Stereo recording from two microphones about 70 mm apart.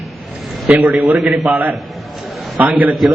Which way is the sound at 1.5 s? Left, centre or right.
Right.